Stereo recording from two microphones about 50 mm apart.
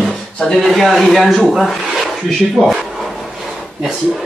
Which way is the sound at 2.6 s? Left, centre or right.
Centre.